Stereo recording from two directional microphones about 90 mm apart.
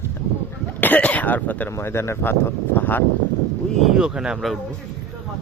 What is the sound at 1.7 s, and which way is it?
Speech, 30° left (ahead or behind).